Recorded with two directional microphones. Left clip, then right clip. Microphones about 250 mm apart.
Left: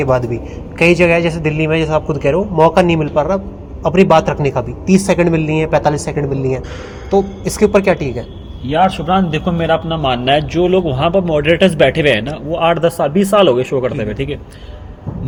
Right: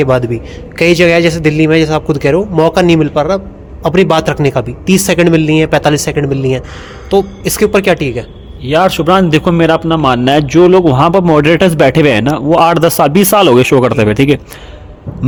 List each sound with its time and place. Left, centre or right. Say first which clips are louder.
0.0 s a man's voice: right 4 dB; right
8.6 s a man's voice: right 4 dB; right